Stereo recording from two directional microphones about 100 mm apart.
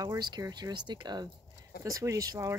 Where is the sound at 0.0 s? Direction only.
35° right (ahead or behind).